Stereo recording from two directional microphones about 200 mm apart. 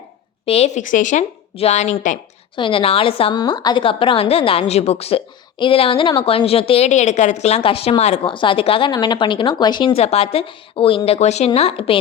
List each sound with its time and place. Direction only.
0.4 s a woman's voice: 30° left (ahead or behind)